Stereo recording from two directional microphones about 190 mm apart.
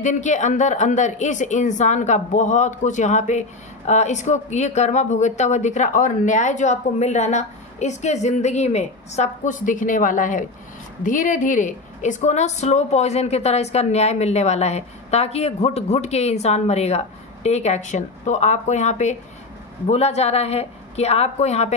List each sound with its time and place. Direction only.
0.0 s speech: 40° left (ahead or behind)